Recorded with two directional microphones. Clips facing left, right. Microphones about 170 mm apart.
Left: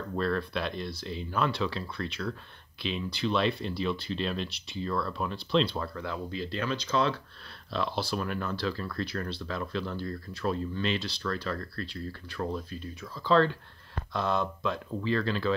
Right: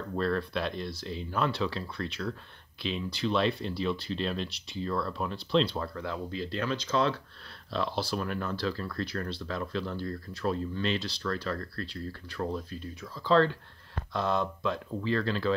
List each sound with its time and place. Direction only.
0.1 s speech: 35° right (ahead or behind)